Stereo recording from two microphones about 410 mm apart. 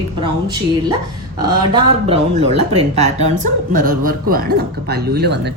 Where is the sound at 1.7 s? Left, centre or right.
Centre.